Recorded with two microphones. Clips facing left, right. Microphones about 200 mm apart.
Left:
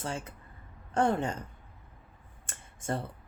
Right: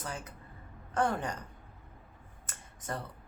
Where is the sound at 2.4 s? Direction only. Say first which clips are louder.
Left 6 dB; 25° left (ahead or behind).